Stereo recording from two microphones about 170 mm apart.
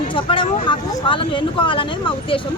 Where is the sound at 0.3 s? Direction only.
30° left (ahead or behind).